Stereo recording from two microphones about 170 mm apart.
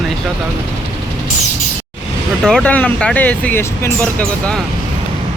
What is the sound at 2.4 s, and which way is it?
Speech, 5° left (ahead or behind).